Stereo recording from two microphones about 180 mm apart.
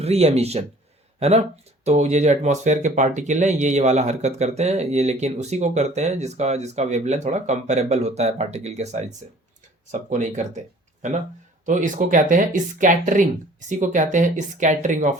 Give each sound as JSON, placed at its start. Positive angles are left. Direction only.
{"t": 0.0, "sound": "speech", "side_deg": -35}
{"t": 11.6, "sound": "speech", "side_deg": -45}